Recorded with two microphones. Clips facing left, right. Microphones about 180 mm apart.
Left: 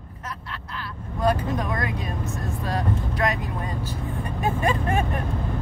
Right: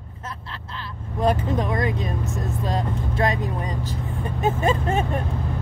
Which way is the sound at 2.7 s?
25° right (ahead or behind).